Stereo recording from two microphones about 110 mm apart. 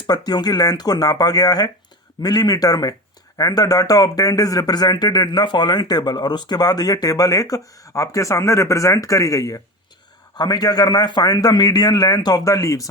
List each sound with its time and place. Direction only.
0.1 s speech: 40° left (ahead or behind)